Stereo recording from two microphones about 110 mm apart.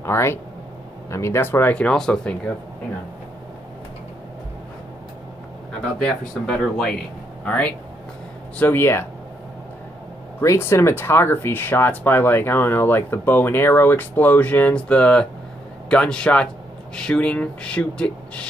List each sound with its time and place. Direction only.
0.0 s speech: 25° left (ahead or behind); by 2.5 s 5° left (ahead or behind)
5.9 s speech: 5° left (ahead or behind)
10.4 s speech: 25° left (ahead or behind); by 18.5 s 10° left (ahead or behind)